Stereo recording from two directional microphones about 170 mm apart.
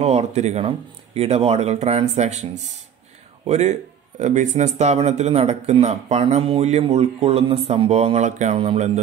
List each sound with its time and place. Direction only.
0.0 s speech: 40° right (ahead or behind)